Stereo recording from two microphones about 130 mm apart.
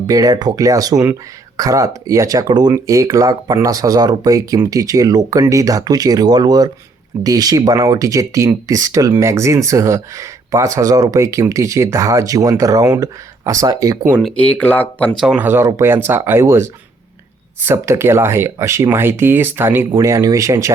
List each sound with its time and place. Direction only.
0.1 s speech: 30° right (ahead or behind)
14.2 s speech: 5° left (ahead or behind)
15.2 s speech: 10° right (ahead or behind)
17.7 s speech: 20° right (ahead or behind)